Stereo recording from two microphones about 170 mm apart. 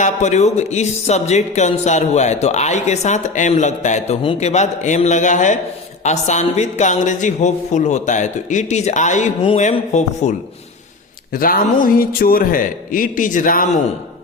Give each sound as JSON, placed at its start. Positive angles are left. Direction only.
{"t": 0.0, "sound": "speech", "side_deg": 45}
{"t": 11.3, "sound": "a man's voice", "side_deg": 55}